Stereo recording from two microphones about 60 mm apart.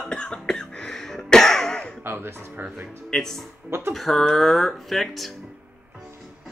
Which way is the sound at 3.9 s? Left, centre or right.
Centre.